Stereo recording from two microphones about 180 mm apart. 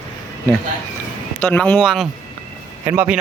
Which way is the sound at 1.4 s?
10° left (ahead or behind).